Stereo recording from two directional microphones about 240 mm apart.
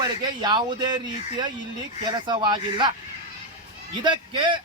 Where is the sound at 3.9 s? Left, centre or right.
Centre.